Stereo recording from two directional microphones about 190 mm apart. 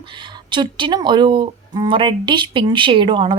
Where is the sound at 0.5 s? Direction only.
25° right (ahead or behind).